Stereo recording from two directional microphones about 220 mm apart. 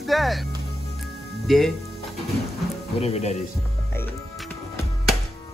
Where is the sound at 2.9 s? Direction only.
30° left (ahead or behind).